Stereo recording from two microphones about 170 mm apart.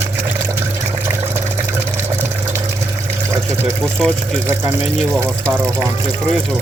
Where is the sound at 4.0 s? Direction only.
5° left (ahead or behind).